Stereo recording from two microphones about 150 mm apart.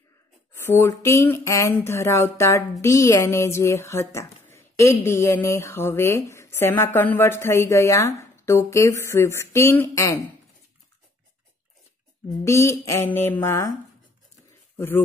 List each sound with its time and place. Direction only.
0.6 s a woman's voice: 15° left (ahead or behind)
12.3 s a woman's voice: 20° left (ahead or behind)
14.8 s a woman's voice: 15° left (ahead or behind)